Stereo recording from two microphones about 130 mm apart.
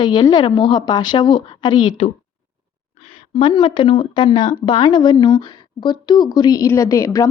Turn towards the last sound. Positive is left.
turn(degrees=25)  # may be behind; listen again after turning